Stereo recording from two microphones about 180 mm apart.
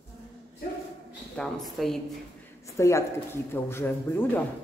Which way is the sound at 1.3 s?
Centre (ahead or behind).